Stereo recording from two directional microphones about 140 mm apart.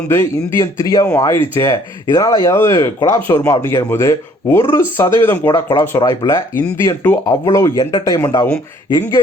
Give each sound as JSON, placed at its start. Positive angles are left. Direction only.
{"t": 0.1, "sound": "speech", "side_deg": 15}